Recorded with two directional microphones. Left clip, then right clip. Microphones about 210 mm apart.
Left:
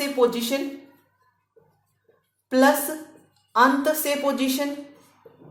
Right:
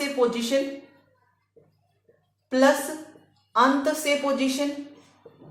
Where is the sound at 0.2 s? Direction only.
35° left (ahead or behind).